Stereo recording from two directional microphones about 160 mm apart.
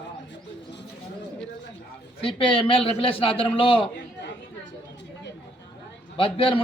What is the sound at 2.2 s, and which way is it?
A man's voice, 35° left (ahead or behind).